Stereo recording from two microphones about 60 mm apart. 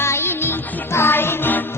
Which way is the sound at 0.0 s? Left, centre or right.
Left.